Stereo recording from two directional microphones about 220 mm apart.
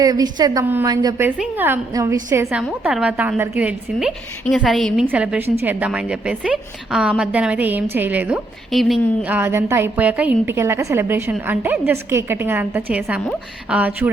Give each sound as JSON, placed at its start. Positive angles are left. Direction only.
{"t": 0.0, "sound": "a woman's voice", "side_deg": -15}